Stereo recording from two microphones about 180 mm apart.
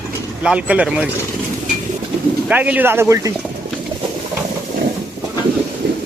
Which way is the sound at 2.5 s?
10° right (ahead or behind).